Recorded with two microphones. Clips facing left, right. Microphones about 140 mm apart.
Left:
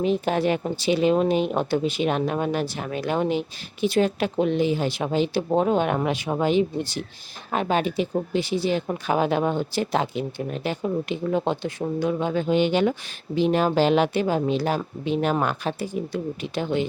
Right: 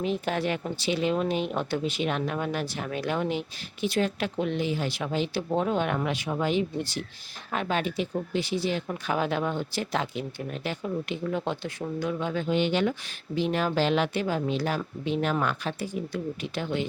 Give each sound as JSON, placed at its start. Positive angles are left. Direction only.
{"t": 0.0, "sound": "speech", "side_deg": 30}
{"t": 6.4, "sound": "speech", "side_deg": 30}
{"t": 15.1, "sound": "speech", "side_deg": 40}